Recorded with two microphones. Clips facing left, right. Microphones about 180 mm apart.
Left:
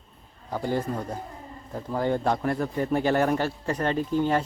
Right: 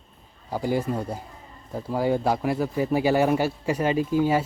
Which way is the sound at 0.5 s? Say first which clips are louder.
Right 2 dB; 10° right (ahead or behind).